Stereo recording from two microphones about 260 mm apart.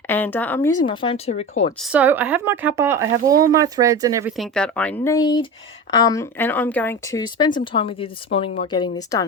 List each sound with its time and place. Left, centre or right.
0.1 s speech: centre
0.9 s a woman's voice: left
1.8 s speech: centre
4.4 s a woman's voice: centre